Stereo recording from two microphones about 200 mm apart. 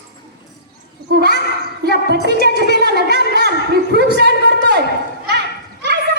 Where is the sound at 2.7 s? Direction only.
55° right (ahead or behind).